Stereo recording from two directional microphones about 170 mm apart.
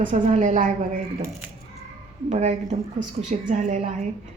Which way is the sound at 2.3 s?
45° right (ahead or behind).